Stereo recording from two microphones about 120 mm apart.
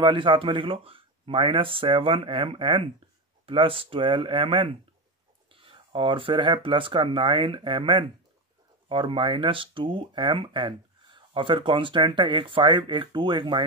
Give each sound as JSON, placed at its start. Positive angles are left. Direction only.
{"t": 0.0, "sound": "speech", "side_deg": -45}